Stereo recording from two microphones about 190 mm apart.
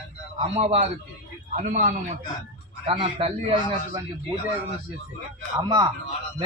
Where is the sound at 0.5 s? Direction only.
35° right (ahead or behind).